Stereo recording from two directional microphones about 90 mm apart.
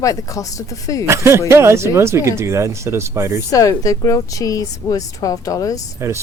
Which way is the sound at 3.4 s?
40° left (ahead or behind).